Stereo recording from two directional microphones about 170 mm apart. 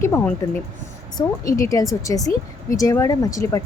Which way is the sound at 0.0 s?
15° left (ahead or behind).